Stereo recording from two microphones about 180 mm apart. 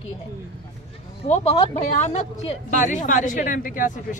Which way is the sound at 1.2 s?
35° left (ahead or behind).